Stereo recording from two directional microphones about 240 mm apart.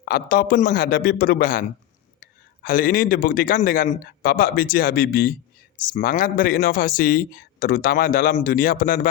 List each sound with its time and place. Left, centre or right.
0.1 s a man's voice: left